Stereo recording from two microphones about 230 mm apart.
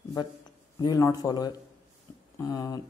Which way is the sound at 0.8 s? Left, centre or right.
Centre.